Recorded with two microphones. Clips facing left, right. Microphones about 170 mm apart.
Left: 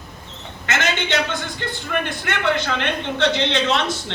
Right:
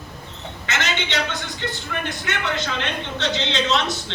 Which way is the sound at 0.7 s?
50° left (ahead or behind).